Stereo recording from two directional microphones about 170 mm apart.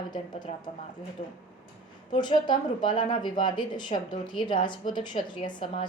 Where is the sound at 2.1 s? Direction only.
25° left (ahead or behind).